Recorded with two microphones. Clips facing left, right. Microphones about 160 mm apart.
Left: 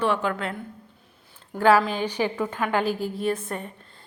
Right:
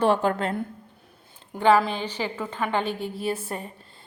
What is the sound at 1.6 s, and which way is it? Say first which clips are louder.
A woman's voice: left 1 dB; 5° left (ahead or behind).